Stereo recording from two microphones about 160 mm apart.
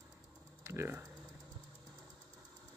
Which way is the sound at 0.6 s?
15° right (ahead or behind).